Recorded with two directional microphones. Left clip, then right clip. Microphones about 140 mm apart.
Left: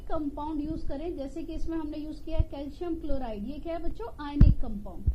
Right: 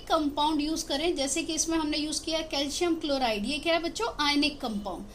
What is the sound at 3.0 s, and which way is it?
Speech, 30° left (ahead or behind).